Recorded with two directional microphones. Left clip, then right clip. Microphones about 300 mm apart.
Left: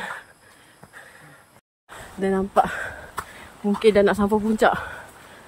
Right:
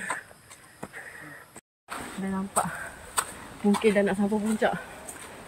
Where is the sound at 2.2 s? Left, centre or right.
Left.